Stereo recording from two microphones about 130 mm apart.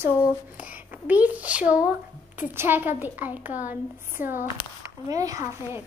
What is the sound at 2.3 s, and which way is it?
A woman's voice, 15° right (ahead or behind).